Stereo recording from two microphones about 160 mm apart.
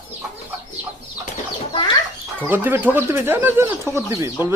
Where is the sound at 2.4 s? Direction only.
10° right (ahead or behind).